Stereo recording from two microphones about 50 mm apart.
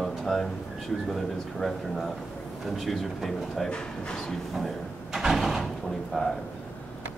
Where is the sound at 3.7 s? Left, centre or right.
Centre.